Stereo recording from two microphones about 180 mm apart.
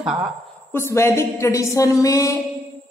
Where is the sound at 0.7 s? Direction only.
15° left (ahead or behind).